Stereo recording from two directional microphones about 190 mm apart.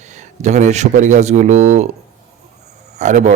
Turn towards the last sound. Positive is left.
turn(degrees=-40)  # may be behind; listen again after turning